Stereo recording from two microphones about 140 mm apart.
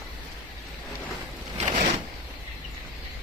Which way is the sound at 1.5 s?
55° right (ahead or behind).